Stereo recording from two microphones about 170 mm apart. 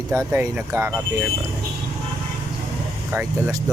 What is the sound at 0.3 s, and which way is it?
Speech, 10° right (ahead or behind).